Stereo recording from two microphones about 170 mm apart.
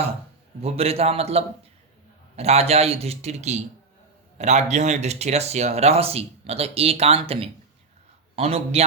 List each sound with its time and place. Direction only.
0.6 s speech: 35° right (ahead or behind)